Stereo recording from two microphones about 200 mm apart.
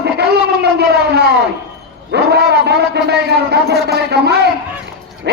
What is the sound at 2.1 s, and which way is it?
A man's voice, 55° right (ahead or behind).